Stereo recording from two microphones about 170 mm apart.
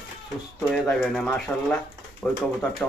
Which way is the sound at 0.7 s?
Centre (ahead or behind).